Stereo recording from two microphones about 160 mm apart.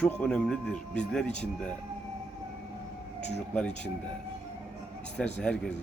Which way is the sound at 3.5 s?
5° left (ahead or behind).